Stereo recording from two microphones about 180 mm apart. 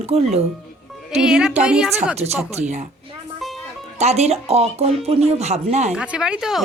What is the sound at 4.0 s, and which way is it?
Speech, 35° right (ahead or behind).